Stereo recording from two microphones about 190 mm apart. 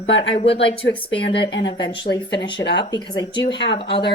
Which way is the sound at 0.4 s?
30° left (ahead or behind).